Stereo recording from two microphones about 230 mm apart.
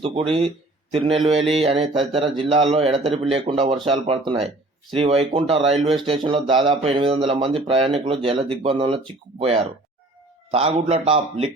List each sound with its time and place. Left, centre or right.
0.0 s a man's voice: right